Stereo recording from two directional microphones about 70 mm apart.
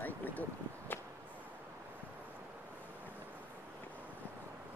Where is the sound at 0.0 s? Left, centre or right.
Left.